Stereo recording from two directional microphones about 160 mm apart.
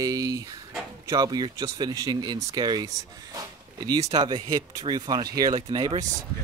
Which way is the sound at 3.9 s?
20° right (ahead or behind).